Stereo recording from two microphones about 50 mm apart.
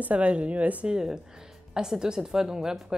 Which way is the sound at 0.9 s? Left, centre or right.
Centre.